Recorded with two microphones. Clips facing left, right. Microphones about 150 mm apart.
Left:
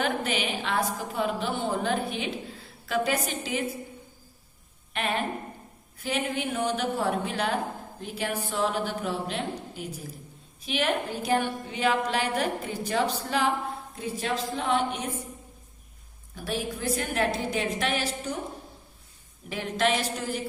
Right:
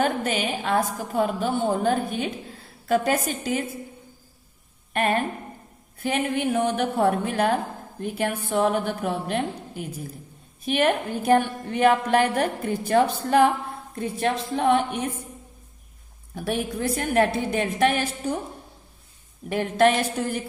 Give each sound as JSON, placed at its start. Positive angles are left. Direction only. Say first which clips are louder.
{"t": 0.0, "sound": "a woman's voice", "louder": "right 4 dB", "side_deg": -45}
{"t": 4.9, "sound": "a woman's voice", "louder": "right 5 dB", "side_deg": -50}
{"t": 16.3, "sound": "a woman's voice", "louder": "right 5 dB", "side_deg": -60}
{"t": 19.5, "sound": "a woman's voice", "louder": "right 7 dB", "side_deg": -50}